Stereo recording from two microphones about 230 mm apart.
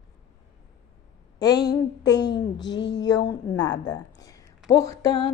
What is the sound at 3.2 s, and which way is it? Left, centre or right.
A woman's voice, centre.